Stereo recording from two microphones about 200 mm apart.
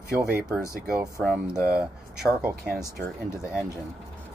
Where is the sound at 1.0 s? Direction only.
5° right (ahead or behind).